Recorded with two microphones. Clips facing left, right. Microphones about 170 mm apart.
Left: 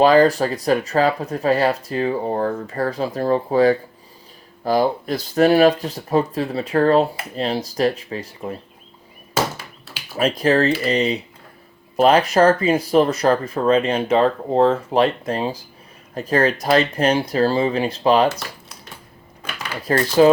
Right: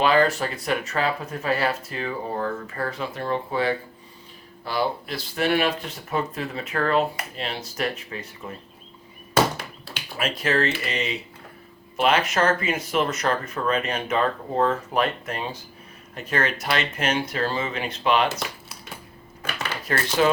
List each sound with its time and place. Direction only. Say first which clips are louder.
0.0 s speech: left 7 dB; 35° left (ahead or behind)
10.2 s speech: left 7 dB; 35° left (ahead or behind)
19.8 s speech: left 8 dB; 35° left (ahead or behind)